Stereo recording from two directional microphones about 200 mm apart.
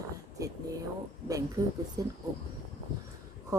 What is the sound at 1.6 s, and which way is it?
Speech, 15° right (ahead or behind).